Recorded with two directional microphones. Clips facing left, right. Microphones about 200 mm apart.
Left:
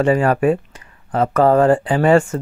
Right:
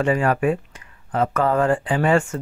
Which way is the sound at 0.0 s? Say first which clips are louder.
Left 4 dB; 35° left (ahead or behind).